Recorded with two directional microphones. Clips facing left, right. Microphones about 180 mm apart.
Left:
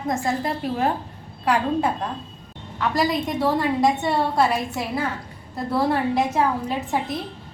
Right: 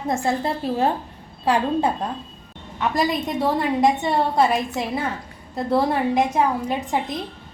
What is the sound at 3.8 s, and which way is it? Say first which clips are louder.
A woman's voice: right 3 dB; 20° right (ahead or behind).